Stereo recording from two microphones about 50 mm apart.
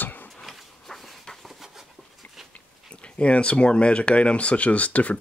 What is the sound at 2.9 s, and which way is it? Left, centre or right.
Speech, left.